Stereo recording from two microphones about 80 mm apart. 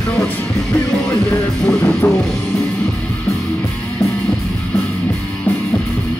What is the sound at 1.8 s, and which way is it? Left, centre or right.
Music, centre.